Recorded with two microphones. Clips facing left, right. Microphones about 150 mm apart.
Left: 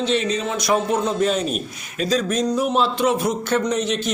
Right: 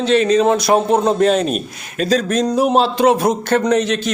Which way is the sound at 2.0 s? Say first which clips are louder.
Right 4 dB; 65° right (ahead or behind).